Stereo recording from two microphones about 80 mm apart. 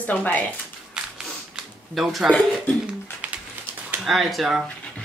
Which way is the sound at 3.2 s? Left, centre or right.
Centre.